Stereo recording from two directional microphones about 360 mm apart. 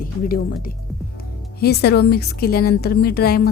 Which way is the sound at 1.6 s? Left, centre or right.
Left.